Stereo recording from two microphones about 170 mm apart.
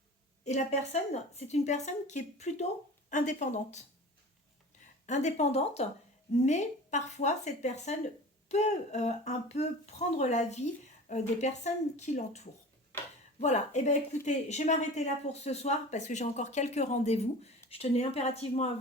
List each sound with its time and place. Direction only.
0.4 s speech: 40° left (ahead or behind)
5.0 s speech: 45° left (ahead or behind)